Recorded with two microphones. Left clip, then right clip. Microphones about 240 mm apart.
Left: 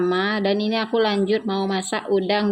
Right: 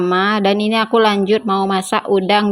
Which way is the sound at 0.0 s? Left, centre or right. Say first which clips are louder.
Right 6 dB; right.